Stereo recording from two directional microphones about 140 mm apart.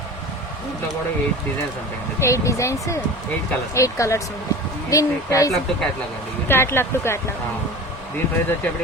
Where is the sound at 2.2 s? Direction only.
20° left (ahead or behind).